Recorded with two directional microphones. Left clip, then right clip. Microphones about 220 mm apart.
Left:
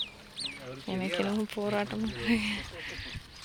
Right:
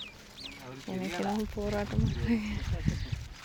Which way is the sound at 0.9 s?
5° left (ahead or behind).